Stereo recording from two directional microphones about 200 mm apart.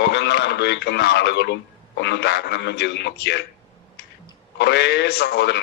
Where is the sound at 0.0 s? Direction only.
60° left (ahead or behind).